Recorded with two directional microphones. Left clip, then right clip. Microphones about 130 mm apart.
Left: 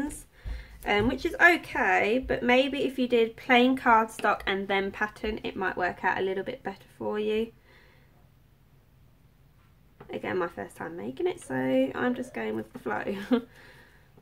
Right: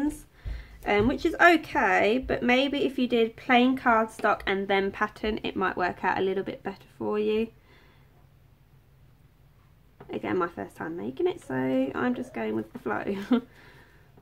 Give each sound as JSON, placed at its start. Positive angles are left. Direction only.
{"t": 0.4, "sound": "speech", "side_deg": -25}
{"t": 10.0, "sound": "speech", "side_deg": -25}